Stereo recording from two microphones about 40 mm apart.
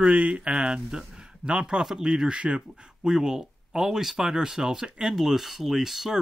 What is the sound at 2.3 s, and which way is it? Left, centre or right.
Speech, right.